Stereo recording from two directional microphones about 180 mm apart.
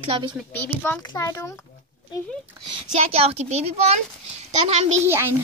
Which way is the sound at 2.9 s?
35° right (ahead or behind).